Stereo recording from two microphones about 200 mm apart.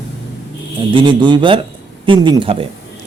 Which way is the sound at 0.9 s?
25° right (ahead or behind).